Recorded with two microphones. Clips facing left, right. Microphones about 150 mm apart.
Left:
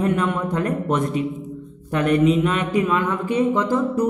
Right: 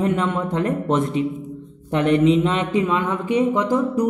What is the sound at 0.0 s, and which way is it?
Speech, 20° right (ahead or behind).